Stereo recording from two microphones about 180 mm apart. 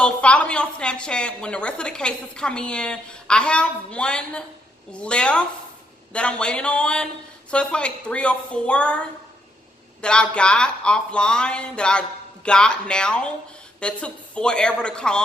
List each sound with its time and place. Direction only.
0.0 s a woman's voice: 5° left (ahead or behind)